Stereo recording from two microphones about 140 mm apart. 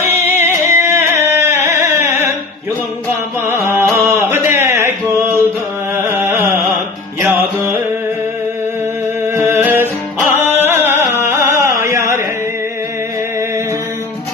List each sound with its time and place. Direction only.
0.1 s music: 15° right (ahead or behind)
3.5 s music: 15° right (ahead or behind)
6.0 s carnatic music: 20° right (ahead or behind)
9.2 s music: 20° right (ahead or behind)